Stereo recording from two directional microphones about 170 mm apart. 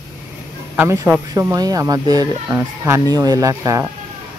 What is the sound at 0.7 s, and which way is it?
Speech, 15° right (ahead or behind).